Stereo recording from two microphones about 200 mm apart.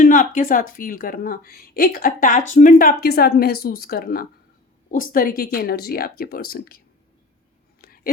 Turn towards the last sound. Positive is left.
turn(degrees=50)  # may be behind; listen again after turning